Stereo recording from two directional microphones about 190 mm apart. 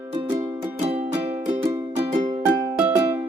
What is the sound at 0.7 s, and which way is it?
Music, 35° right (ahead or behind).